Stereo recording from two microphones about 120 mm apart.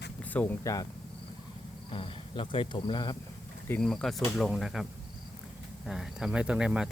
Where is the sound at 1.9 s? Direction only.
50° left (ahead or behind).